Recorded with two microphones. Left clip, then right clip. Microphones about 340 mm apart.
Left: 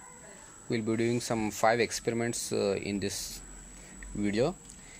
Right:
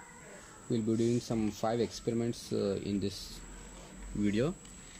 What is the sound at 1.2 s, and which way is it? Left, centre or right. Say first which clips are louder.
Speech: left 6 dB; left.